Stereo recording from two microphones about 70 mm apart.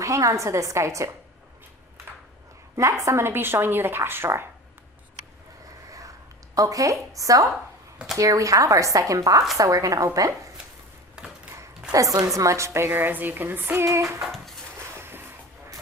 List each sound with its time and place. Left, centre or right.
0.0 s speech: right
2.7 s a woman's voice: right
6.5 s a woman's voice: right
11.9 s a woman's voice: right
14.2 s dog: centre
15.0 s a sound: right